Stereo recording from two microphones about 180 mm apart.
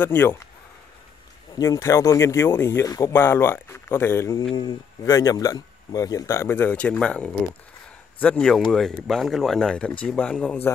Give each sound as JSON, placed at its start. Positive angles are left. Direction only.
{"t": 0.0, "sound": "speech", "side_deg": 10}
{"t": 1.6, "sound": "speech", "side_deg": 20}